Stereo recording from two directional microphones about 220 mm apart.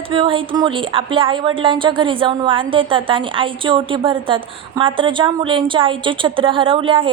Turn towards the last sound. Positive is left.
turn(degrees=-25)  # may be behind; listen again after turning